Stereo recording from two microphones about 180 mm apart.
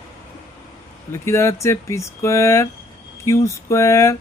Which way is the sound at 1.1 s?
15° left (ahead or behind).